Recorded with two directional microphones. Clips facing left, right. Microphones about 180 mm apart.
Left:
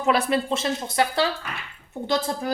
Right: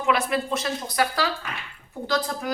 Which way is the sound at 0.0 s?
30° left (ahead or behind).